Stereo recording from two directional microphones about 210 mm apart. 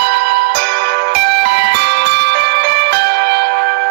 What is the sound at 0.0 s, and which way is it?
Music, 55° right (ahead or behind).